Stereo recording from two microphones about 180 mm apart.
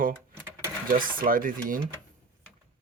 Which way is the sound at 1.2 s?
50° right (ahead or behind).